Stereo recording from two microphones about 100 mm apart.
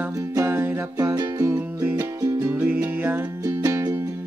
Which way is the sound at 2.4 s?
15° right (ahead or behind).